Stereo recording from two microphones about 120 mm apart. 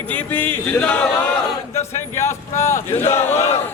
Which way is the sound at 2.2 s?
25° left (ahead or behind).